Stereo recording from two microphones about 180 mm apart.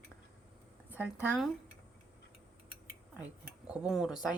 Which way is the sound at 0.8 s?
10° right (ahead or behind).